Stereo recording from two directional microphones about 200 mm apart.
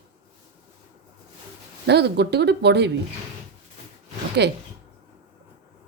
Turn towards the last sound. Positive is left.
turn(degrees=-55)  # may be behind; listen again after turning